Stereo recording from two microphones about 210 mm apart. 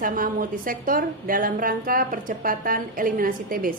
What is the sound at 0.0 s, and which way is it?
A woman's voice, 40° right (ahead or behind).